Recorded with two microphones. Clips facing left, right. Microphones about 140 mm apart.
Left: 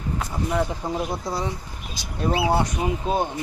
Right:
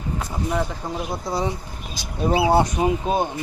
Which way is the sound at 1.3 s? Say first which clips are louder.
Right 3 dB; 25° right (ahead or behind).